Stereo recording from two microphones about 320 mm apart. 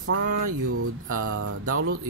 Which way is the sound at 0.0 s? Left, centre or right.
Right.